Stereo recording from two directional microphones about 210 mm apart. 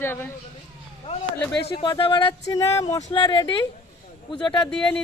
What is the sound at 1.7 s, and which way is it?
Speech, 20° left (ahead or behind).